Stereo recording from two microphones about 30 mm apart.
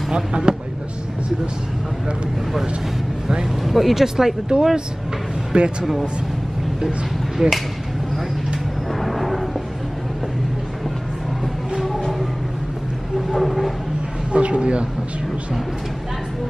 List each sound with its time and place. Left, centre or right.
0.1 s speech: right
3.6 s speech: centre
3.9 s speech: centre
4.5 s speech: right
7.3 s speech: centre
9.0 s a sound: centre
13.3 s vehicle: centre
14.3 s a sound: right